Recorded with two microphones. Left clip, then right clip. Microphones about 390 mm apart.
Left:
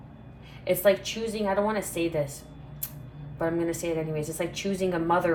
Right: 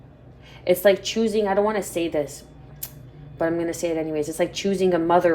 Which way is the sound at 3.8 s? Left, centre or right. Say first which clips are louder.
Right 5 dB; right.